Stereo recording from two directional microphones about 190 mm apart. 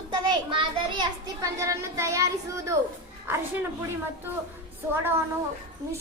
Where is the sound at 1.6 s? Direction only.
15° right (ahead or behind).